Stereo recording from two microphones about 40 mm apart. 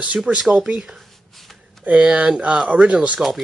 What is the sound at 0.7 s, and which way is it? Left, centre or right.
Speech, right.